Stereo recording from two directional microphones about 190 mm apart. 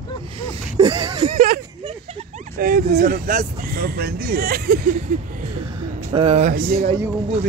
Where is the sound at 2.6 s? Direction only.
55° right (ahead or behind).